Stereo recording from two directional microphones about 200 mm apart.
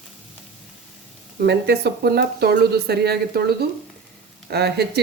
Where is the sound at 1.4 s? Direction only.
55° right (ahead or behind).